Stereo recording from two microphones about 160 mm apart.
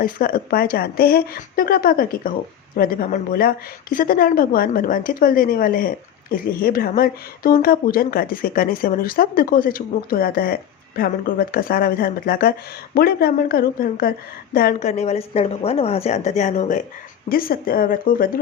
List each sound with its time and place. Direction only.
0.0 s speech: 65° left (ahead or behind)
14.8 s speech: 45° left (ahead or behind)
17.2 s speech: 65° left (ahead or behind)